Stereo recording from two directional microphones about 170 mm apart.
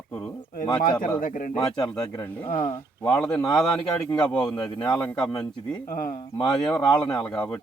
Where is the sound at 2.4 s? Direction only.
55° left (ahead or behind).